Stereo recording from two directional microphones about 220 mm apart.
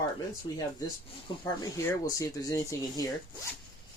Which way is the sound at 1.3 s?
20° left (ahead or behind).